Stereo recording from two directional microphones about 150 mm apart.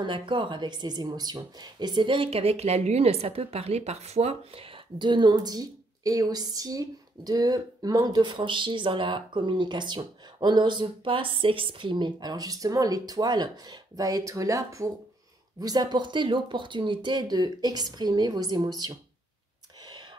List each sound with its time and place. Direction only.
0.0 s speech: 30° right (ahead or behind)
19.8 s whispering: 30° right (ahead or behind)